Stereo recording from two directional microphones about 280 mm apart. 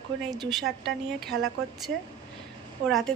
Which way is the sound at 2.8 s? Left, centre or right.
Centre.